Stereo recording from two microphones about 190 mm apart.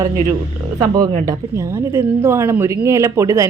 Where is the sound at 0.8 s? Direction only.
20° right (ahead or behind).